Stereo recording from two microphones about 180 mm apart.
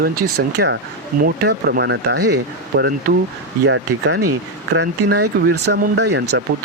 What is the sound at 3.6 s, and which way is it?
Speech, 90° right.